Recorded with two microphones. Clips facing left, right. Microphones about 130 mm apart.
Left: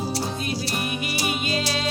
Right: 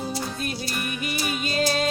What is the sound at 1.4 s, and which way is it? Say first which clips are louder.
Music: right 2 dB; 40° right (ahead or behind).